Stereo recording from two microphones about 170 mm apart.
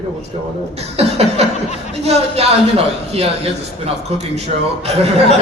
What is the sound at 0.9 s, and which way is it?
A man's voice, 40° right (ahead or behind).